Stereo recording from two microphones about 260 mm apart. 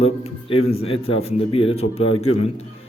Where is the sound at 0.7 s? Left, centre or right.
Left.